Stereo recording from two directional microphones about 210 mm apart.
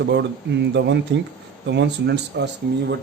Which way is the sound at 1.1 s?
55° right (ahead or behind).